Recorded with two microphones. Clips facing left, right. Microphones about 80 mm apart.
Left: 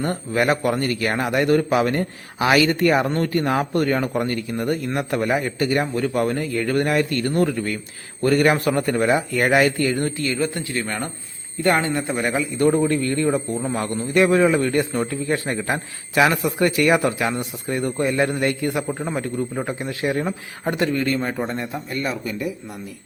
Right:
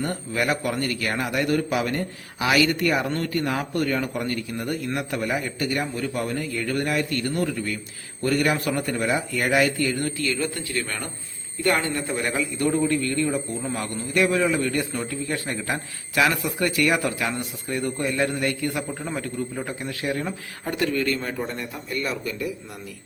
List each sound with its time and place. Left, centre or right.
0.0 s a man's voice: left
10.0 s a man's voice: left